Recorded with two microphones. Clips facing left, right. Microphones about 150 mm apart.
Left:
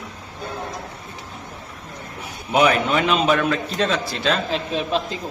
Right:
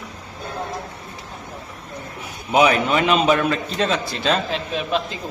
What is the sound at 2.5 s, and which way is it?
A man's voice, centre (ahead or behind).